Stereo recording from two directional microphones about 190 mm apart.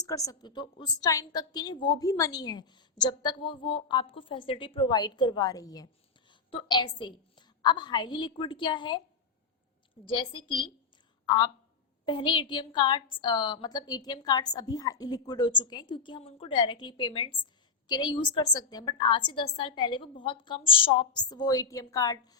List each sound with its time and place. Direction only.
0.0 s a woman's voice: 20° left (ahead or behind)
10.1 s a woman's voice: 25° left (ahead or behind)